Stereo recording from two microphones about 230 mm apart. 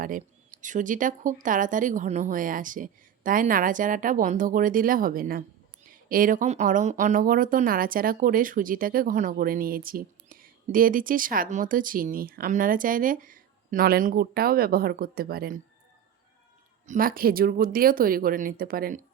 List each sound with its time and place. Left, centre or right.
0.6 s speech: right
16.8 s speech: right